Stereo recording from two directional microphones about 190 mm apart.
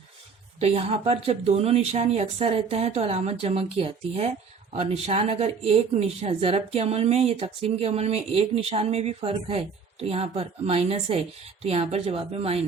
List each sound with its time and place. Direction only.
0.6 s speech: 30° right (ahead or behind)